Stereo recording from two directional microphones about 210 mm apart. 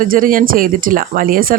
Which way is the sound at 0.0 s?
40° right (ahead or behind).